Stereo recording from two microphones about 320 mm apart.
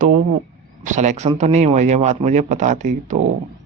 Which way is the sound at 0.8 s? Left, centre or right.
Right.